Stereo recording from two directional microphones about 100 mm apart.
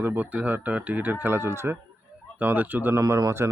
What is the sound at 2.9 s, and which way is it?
Speech, 35° right (ahead or behind).